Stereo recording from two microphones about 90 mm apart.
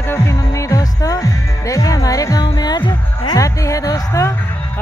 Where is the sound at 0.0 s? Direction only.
30° left (ahead or behind); by 3.3 s 50° left (ahead or behind).